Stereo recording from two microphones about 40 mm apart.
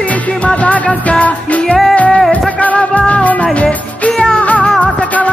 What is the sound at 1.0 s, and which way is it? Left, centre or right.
Music, left.